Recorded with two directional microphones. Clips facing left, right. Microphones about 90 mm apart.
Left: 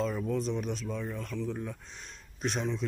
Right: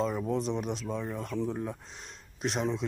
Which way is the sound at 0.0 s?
15° right (ahead or behind).